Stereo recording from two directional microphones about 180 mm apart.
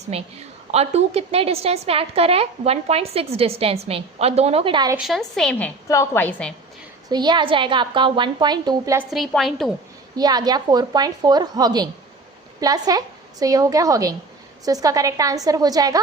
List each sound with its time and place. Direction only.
0.1 s a woman's voice: 35° right (ahead or behind)
4.9 s a woman's voice: centre (ahead or behind)
7.1 s a woman's voice: 25° right (ahead or behind)
9.0 s a woman's voice: centre (ahead or behind)
10.2 s a woman's voice: 20° right (ahead or behind)